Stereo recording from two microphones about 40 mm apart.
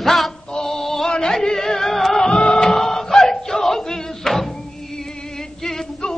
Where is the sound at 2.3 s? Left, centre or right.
Left.